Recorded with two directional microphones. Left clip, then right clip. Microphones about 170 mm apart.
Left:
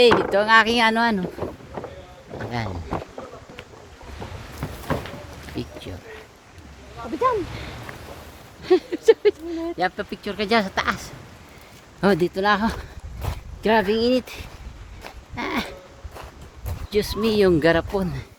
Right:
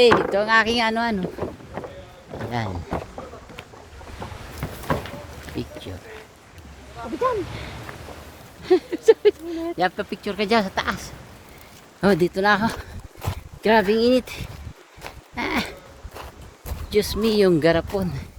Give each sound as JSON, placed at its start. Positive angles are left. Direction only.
{"t": 0.0, "sound": "speech", "side_deg": 10}
{"t": 1.2, "sound": "boat", "side_deg": -30}
{"t": 2.5, "sound": "speech", "side_deg": -10}
{"t": 4.6, "sound": "a sound", "side_deg": -25}
{"t": 5.6, "sound": "speech", "side_deg": 5}
{"t": 8.6, "sound": "speech", "side_deg": 5}
{"t": 9.5, "sound": "speech", "side_deg": -10}
{"t": 15.4, "sound": "a sound", "side_deg": 0}
{"t": 16.9, "sound": "speech", "side_deg": -5}